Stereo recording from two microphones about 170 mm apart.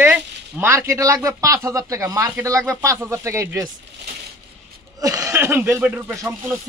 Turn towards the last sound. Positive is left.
turn(degrees=-10)  # may be behind; listen again after turning